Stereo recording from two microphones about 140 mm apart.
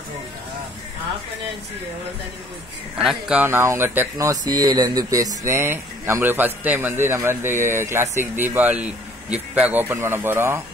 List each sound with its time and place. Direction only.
3.0 s speech: 5° right (ahead or behind)
3.4 s speech: 15° right (ahead or behind)